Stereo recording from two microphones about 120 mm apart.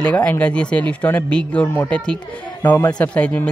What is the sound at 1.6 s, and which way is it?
Speech, 20° left (ahead or behind).